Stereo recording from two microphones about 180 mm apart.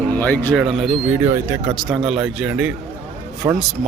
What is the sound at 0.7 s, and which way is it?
A man's voice, centre (ahead or behind).